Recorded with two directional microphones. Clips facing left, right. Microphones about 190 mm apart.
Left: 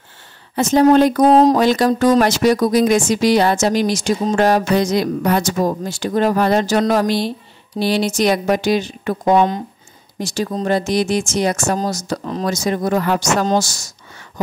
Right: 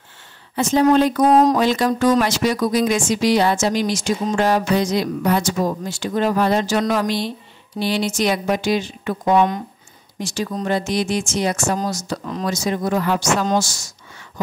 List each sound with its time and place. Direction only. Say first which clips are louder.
0.6 s speech: left 3 dB; 40° left (ahead or behind)